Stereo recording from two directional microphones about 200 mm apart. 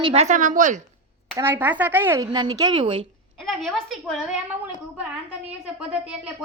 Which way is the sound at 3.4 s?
Centre (ahead or behind).